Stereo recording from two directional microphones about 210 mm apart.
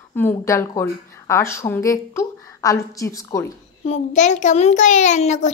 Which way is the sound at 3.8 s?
30° left (ahead or behind).